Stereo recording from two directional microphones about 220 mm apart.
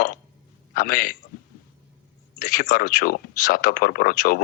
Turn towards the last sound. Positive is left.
turn(degrees=40)  # may be behind; listen again after turning